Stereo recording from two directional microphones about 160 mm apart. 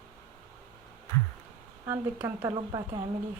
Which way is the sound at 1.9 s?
10° right (ahead or behind).